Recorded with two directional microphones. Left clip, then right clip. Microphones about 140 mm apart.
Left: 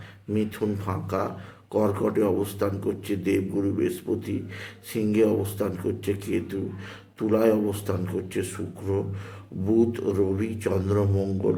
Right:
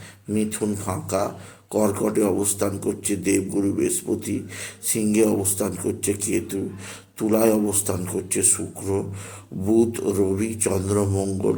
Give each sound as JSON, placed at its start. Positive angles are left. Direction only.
{"t": 0.3, "sound": "speech", "side_deg": -20}